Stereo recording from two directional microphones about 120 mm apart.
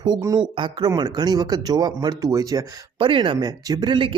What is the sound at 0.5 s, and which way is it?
Speech, 45° right (ahead or behind).